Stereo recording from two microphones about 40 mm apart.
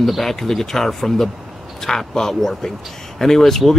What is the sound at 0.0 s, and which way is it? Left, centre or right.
Speech, centre.